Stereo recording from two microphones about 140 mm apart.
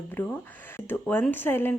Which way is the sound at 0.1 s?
15° left (ahead or behind).